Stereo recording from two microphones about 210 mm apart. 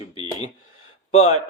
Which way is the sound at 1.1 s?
35° left (ahead or behind).